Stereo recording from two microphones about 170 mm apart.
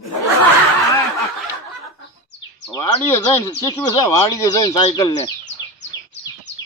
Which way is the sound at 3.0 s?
15° left (ahead or behind).